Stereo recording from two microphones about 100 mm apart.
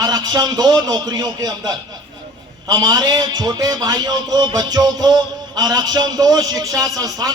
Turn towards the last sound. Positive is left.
turn(degrees=-35)  # may be behind; listen again after turning